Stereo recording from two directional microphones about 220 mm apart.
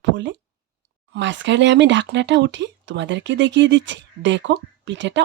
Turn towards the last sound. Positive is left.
turn(degrees=-55)  # may be behind; listen again after turning